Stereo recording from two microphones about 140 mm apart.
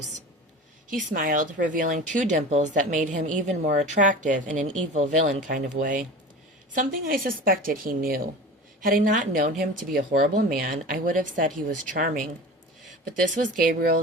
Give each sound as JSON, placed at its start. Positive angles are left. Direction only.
{"t": 0.9, "sound": "speech", "side_deg": -75}
{"t": 6.7, "sound": "a woman's voice", "side_deg": -90}
{"t": 8.8, "sound": "speech", "side_deg": -80}